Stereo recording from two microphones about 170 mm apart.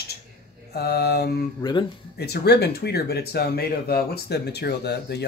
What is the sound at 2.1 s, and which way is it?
Speech, 70° left (ahead or behind).